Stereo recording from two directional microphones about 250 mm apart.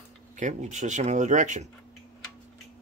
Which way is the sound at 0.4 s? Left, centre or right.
Right.